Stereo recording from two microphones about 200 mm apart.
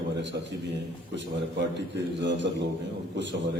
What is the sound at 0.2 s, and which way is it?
A man's voice, 60° right (ahead or behind).